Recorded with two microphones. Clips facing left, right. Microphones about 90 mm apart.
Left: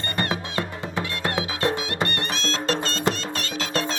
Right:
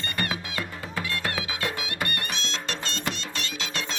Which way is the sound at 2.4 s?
40° left (ahead or behind).